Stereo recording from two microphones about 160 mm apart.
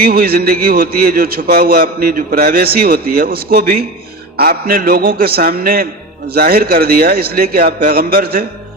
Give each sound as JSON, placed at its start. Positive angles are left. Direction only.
{"t": 0.0, "sound": "a man's voice", "side_deg": -70}